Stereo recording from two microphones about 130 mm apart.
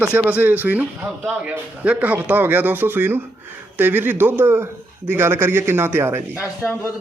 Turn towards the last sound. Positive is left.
turn(degrees=20)  # may be behind; listen again after turning